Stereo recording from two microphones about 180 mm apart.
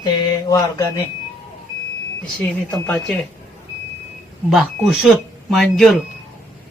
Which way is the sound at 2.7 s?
5° left (ahead or behind).